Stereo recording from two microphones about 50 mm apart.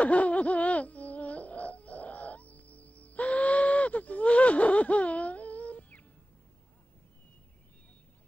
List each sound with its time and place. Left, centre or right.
0.0 s music: left